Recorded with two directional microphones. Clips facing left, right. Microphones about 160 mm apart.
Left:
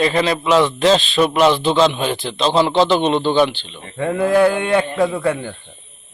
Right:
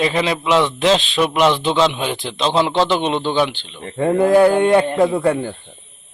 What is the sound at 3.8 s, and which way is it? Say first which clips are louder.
Speech: right 3 dB; 40° right (ahead or behind).